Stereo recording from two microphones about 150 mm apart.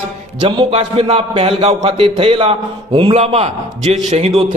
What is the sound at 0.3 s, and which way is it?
A man's voice, 35° right (ahead or behind).